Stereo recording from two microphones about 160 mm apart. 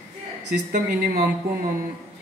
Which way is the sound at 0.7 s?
75° right (ahead or behind).